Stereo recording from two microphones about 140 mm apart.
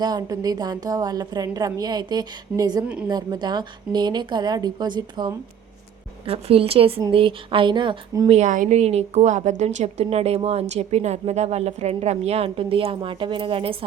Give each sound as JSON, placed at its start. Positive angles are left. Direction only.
{"t": 0.0, "sound": "a woman's voice", "side_deg": -30}
{"t": 2.8, "sound": "a woman's voice", "side_deg": -10}
{"t": 3.1, "sound": "a woman's voice", "side_deg": -30}
{"t": 6.2, "sound": "a woman's voice", "side_deg": -45}
{"t": 8.3, "sound": "a woman's voice", "side_deg": -60}